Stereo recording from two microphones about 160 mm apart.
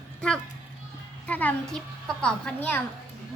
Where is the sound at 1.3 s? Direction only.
10° left (ahead or behind).